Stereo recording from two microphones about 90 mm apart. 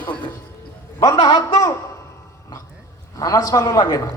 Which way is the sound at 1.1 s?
60° left (ahead or behind).